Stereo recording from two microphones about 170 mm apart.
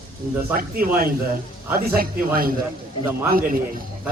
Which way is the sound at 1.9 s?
60° right (ahead or behind).